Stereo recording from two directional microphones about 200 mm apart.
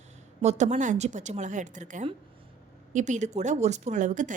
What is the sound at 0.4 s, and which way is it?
A woman's voice, 35° right (ahead or behind).